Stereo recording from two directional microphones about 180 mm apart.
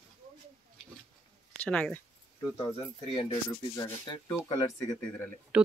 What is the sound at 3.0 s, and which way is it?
Speech, 30° left (ahead or behind).